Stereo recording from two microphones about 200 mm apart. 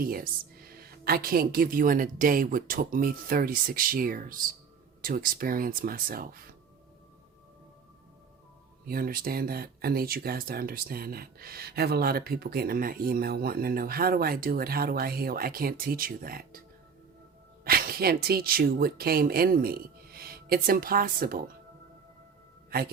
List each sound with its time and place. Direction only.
0.0 s speech: 45° right (ahead or behind)
8.9 s speech: 45° right (ahead or behind)
17.6 s speech: 50° right (ahead or behind)